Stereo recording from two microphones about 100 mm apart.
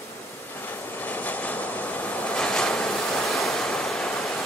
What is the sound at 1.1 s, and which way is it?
Vehicle, 15° left (ahead or behind).